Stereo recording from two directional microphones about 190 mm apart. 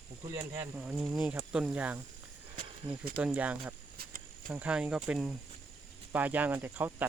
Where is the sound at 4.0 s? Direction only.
50° right (ahead or behind).